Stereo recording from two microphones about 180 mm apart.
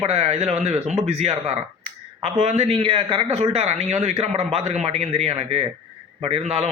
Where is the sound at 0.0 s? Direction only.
35° right (ahead or behind).